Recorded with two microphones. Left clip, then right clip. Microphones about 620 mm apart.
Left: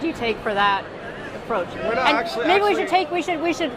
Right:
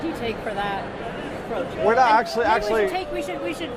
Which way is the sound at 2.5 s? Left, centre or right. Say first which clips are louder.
Left 3 dB; left.